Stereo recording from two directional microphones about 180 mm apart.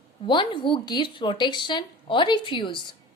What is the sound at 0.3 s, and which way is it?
Speech, 25° left (ahead or behind).